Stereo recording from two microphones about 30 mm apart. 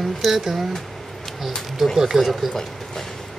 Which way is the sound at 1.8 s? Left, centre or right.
Centre.